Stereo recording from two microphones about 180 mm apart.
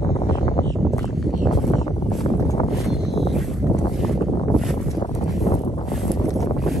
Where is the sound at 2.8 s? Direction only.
Centre (ahead or behind).